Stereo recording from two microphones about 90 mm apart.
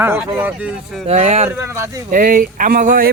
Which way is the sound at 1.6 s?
30° right (ahead or behind).